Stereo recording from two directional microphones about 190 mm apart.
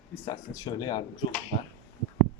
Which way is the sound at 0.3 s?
20° left (ahead or behind).